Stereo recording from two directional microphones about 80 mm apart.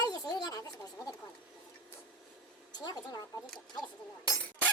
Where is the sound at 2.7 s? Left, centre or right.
Left.